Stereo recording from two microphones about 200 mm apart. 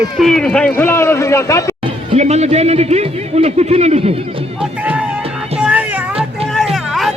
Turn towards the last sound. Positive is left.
turn(degrees=0)  # may be behind; listen again after turning